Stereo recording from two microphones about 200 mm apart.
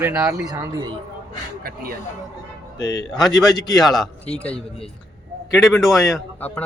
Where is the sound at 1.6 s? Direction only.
45° right (ahead or behind).